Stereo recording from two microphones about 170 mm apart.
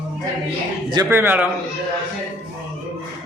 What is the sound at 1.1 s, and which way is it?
Speech, 10° right (ahead or behind).